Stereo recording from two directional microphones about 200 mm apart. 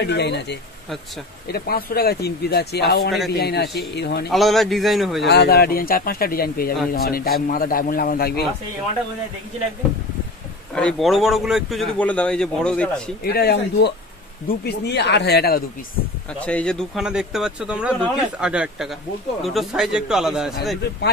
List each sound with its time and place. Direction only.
0.0 s speech: 55° left (ahead or behind)
4.3 s a man's voice: centre (ahead or behind)
5.2 s speech: 55° left (ahead or behind)
10.7 s a man's voice: 5° left (ahead or behind)
13.2 s speech: 50° left (ahead or behind)
16.3 s a man's voice: 5° left (ahead or behind)